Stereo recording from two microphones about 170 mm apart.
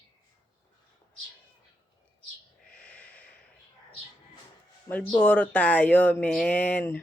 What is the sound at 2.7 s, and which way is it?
Snort, 5° left (ahead or behind).